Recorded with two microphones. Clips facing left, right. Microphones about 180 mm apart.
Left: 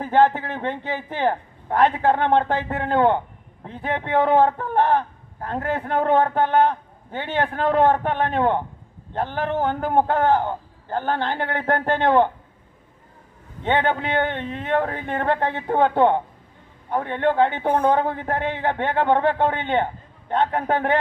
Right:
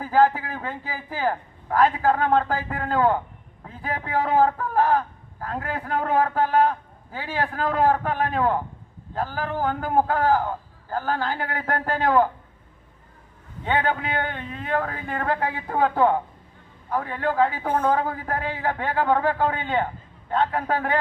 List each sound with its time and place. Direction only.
0.0 s a man's voice: 25° left (ahead or behind)
13.7 s a man's voice: 25° left (ahead or behind)